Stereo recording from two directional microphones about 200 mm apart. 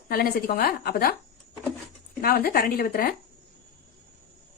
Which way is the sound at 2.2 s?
45° left (ahead or behind).